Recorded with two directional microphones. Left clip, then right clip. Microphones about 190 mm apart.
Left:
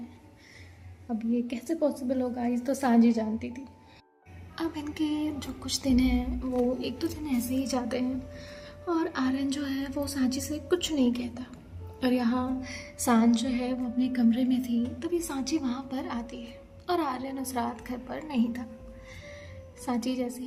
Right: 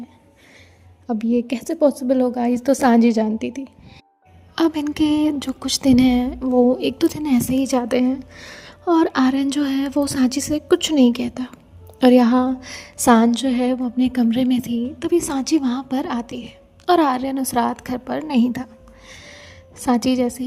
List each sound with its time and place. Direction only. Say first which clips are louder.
1.0 s a woman's voice: right 10 dB; 60° right (ahead or behind)